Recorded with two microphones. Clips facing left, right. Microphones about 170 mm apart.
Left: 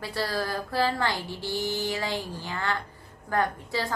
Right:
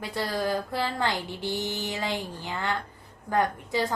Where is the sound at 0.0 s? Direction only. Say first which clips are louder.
Right 1 dB; 20° right (ahead or behind).